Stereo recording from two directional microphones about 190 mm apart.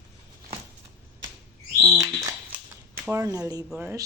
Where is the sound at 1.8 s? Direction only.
5° right (ahead or behind).